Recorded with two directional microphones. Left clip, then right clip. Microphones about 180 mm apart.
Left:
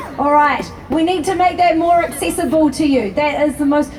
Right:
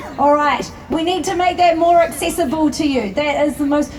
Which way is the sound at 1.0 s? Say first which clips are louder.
Left 2 dB; 20° right (ahead or behind).